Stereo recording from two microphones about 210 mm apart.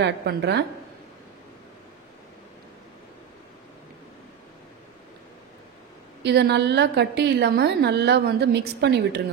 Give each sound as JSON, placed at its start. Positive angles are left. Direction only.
{"t": 0.0, "sound": "a woman's voice", "side_deg": -50}
{"t": 6.2, "sound": "a woman's voice", "side_deg": -50}